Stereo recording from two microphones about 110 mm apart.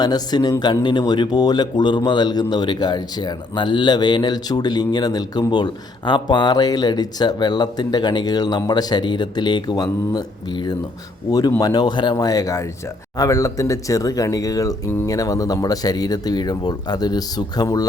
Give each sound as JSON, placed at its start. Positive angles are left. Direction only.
{"t": 0.0, "sound": "a man's voice", "side_deg": 40}